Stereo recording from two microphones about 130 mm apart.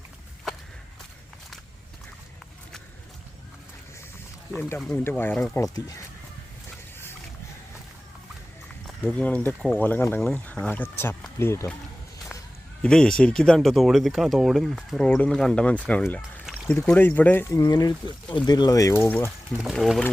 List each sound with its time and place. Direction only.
5.0 s speech: 15° left (ahead or behind)
9.0 s speech: 10° left (ahead or behind)
12.8 s speech: 5° left (ahead or behind)
17.6 s speech: 30° left (ahead or behind)
19.7 s speech: 5° left (ahead or behind)